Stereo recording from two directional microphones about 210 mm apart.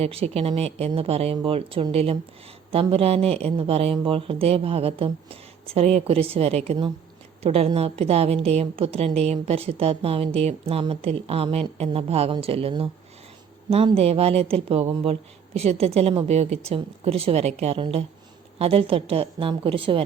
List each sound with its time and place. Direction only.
0.0 s a woman's voice: 30° right (ahead or behind)